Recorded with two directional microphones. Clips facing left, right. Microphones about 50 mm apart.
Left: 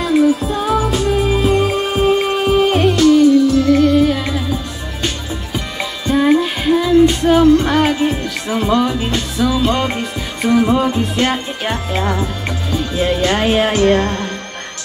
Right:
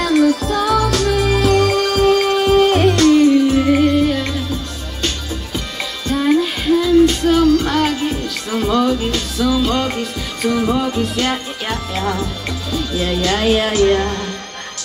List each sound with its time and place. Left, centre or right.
0.0 s music: right
3.4 s music: right
3.7 s music: centre
5.8 s music: left